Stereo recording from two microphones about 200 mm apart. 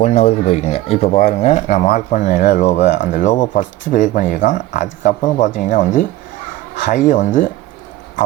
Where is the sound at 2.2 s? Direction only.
40° left (ahead or behind).